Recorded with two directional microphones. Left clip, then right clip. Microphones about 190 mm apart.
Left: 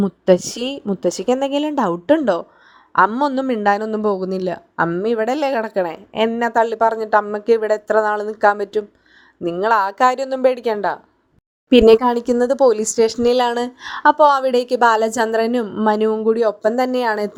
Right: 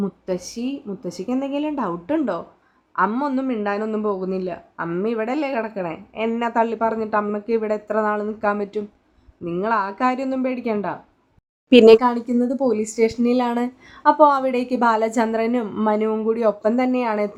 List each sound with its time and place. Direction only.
0.0 s a woman's voice: 40° left (ahead or behind)
11.7 s a woman's voice: centre (ahead or behind)
12.0 s a woman's voice: 35° left (ahead or behind)
15.6 s speech: 20° left (ahead or behind)
15.9 s a woman's voice: 30° left (ahead or behind)